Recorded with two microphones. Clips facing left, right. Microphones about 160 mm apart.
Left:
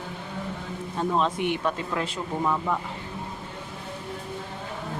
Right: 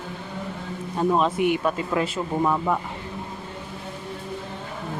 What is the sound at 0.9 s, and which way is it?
Speech, 10° right (ahead or behind).